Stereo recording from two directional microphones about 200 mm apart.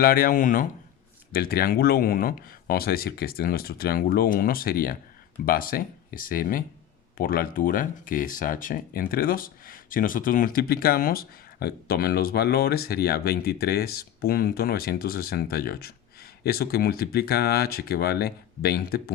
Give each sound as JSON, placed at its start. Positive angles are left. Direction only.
{"t": 0.0, "sound": "speech", "side_deg": 45}